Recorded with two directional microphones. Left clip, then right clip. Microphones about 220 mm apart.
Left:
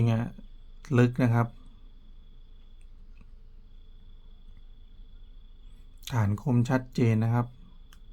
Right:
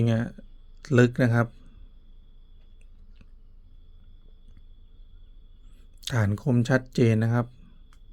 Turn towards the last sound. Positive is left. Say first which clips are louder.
# right 4 dB
turn(degrees=-25)  # may be behind; listen again after turning